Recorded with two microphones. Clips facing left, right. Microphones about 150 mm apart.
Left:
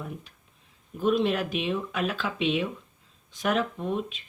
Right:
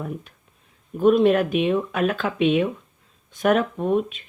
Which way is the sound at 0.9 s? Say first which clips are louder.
Right 8 dB; 55° right (ahead or behind).